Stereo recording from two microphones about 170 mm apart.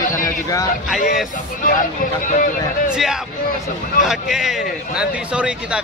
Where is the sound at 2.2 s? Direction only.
50° left (ahead or behind).